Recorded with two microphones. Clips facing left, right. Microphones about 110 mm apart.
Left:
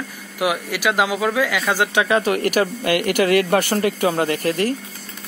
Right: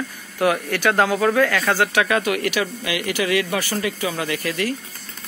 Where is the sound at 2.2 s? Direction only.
40° left (ahead or behind).